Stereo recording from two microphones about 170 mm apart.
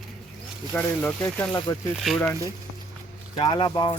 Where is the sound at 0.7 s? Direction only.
10° left (ahead or behind).